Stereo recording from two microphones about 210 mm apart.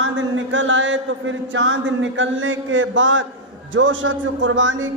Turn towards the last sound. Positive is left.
turn(degrees=-65)  # may be behind; listen again after turning